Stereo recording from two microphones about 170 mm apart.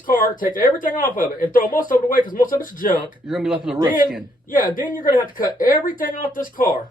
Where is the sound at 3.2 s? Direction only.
5° right (ahead or behind).